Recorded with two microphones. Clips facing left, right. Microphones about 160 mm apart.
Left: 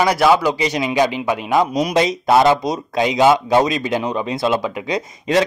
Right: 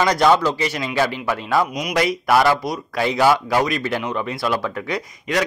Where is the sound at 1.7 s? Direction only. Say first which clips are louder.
Left 4 dB; 30° left (ahead or behind).